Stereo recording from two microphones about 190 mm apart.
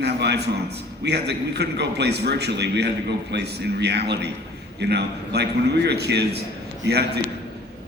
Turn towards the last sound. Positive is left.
turn(degrees=-60)  # may be behind; listen again after turning